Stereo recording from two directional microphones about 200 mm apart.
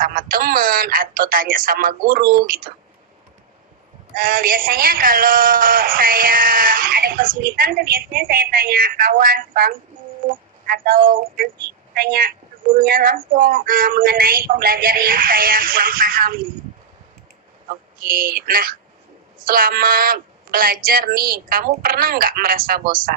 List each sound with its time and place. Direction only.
0.0 s speech: 45° right (ahead or behind)
4.1 s a woman's voice: 45° right (ahead or behind)
18.0 s a woman's voice: 45° right (ahead or behind)